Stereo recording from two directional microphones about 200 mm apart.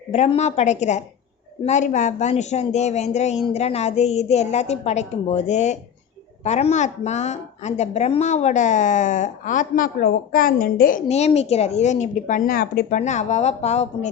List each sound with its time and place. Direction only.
0.1 s a woman's voice: 35° left (ahead or behind)
13.0 s a woman's voice: 35° left (ahead or behind)